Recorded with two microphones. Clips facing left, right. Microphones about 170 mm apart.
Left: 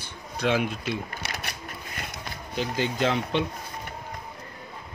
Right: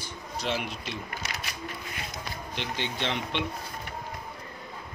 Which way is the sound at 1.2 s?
65° left (ahead or behind).